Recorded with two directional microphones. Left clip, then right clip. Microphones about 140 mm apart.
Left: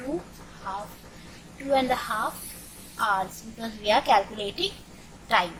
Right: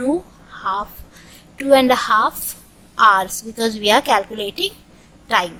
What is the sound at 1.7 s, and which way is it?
Speech, 60° right (ahead or behind).